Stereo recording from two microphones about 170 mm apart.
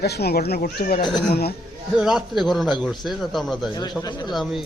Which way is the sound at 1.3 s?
65° left (ahead or behind).